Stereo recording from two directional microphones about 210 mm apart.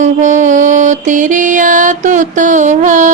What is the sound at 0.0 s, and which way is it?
Mantra, 35° right (ahead or behind).